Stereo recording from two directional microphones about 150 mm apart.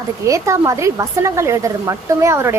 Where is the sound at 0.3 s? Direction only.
20° right (ahead or behind).